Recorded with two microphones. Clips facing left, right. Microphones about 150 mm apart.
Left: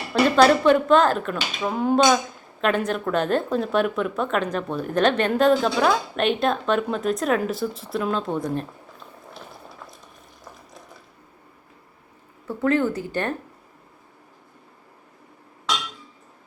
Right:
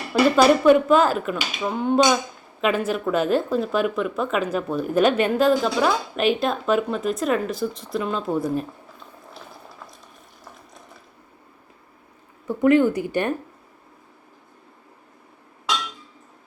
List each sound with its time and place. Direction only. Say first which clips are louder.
0.1 s speech: even; 10° right (ahead or behind)
12.5 s speech: right 5 dB; 15° right (ahead or behind)